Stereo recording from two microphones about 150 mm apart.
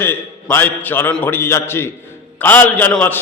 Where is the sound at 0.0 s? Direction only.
15° left (ahead or behind).